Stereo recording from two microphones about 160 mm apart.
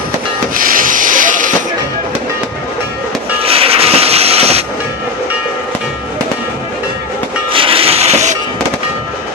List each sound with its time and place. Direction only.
0.5 s a sound: 60° right (ahead or behind)
3.4 s train: 35° right (ahead or behind)
7.5 s music: 35° right (ahead or behind)